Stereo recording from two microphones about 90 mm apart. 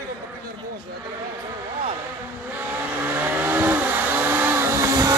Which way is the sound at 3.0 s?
25° right (ahead or behind).